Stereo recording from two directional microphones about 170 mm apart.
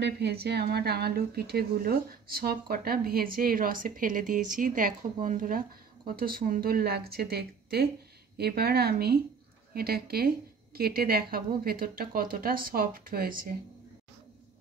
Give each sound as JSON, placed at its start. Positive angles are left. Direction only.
{"t": 0.0, "sound": "a woman's voice", "side_deg": -75}